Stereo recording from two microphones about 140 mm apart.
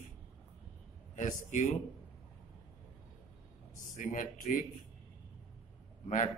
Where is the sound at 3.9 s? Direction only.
65° left (ahead or behind).